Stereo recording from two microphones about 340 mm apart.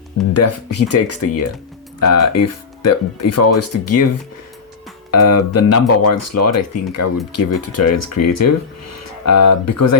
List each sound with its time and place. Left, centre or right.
0.3 s speech: left
5.1 s speech: left